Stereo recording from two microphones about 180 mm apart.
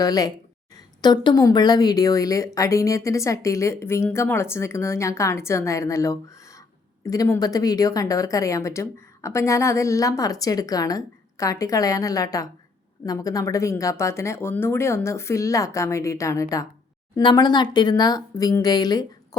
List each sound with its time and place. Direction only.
0.0 s a woman's voice: 20° left (ahead or behind)